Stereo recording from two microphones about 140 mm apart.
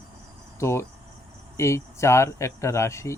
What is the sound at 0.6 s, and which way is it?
Speech, 20° left (ahead or behind).